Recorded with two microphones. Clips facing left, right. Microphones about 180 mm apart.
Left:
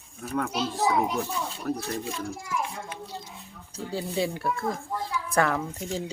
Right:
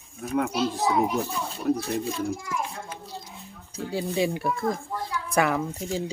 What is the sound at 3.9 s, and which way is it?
Speech, 15° right (ahead or behind).